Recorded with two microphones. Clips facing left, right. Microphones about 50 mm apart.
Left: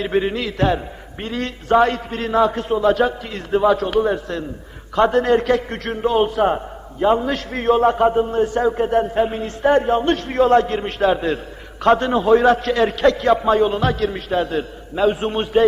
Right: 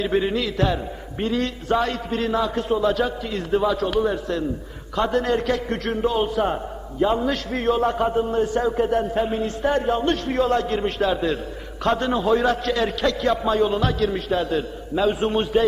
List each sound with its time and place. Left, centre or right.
0.0 s a man's voice: left